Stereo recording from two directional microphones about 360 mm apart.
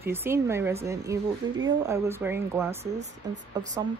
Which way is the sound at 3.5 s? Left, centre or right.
Centre.